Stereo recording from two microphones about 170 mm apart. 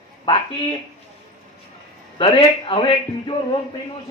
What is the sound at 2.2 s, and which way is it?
A man's voice, 30° left (ahead or behind).